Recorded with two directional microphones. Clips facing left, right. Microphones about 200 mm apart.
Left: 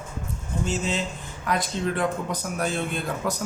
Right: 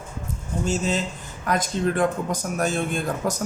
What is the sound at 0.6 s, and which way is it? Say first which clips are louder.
Speech: right 3 dB; 40° right (ahead or behind).